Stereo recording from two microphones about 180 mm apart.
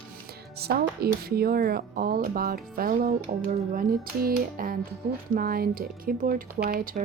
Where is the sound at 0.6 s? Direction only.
60° right (ahead or behind).